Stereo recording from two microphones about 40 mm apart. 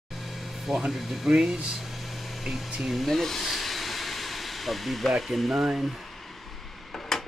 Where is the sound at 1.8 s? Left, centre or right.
Centre.